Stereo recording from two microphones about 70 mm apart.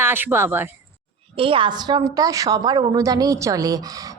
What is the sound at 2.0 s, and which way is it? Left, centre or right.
Speech, right.